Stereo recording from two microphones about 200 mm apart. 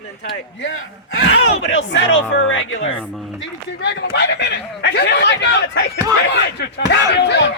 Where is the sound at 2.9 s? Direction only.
Centre (ahead or behind).